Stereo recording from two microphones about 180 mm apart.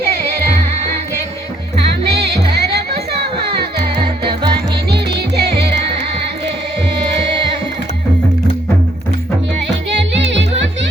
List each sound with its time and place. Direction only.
2.0 s music: 65° right (ahead or behind)
4.9 s music: 65° right (ahead or behind)
9.9 s music: 80° right